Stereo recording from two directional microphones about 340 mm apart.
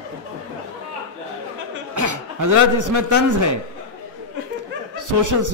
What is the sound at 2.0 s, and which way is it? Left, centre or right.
A man's voice, right.